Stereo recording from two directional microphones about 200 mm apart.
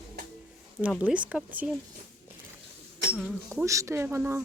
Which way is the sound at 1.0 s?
5° right (ahead or behind).